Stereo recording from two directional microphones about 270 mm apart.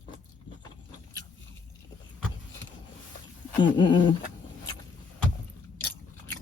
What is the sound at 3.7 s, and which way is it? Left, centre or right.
Speech, centre.